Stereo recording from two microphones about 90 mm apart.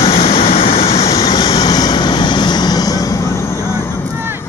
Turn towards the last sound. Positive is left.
turn(degrees=45)  # may be behind; listen again after turning